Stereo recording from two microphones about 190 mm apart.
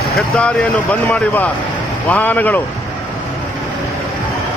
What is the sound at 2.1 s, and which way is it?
Speech, 10° left (ahead or behind).